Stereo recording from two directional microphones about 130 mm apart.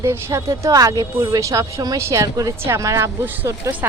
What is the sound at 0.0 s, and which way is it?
A woman's voice, 20° right (ahead or behind).